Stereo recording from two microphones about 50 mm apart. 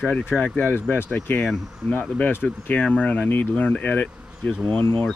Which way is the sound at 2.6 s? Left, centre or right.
Left.